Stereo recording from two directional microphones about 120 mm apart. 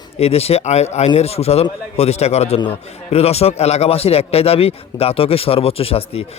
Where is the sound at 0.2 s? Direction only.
55° left (ahead or behind).